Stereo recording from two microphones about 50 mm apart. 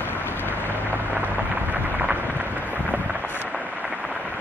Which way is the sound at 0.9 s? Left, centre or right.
Right.